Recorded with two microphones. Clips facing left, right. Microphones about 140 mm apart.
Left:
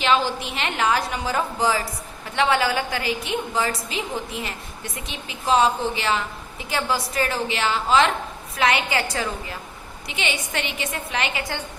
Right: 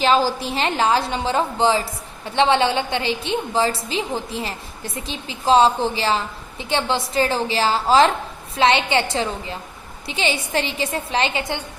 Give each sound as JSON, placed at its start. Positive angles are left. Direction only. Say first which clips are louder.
{"t": 0.0, "sound": "a woman's voice", "louder": "right 3 dB", "side_deg": -35}